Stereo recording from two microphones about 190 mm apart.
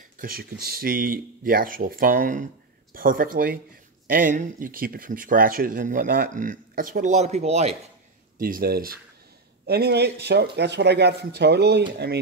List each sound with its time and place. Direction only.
0.2 s speech: 50° right (ahead or behind); by 7.7 s 35° right (ahead or behind)
8.4 s speech: 50° right (ahead or behind)